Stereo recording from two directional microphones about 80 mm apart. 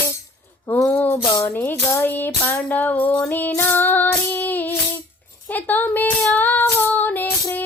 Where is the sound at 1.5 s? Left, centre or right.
Left.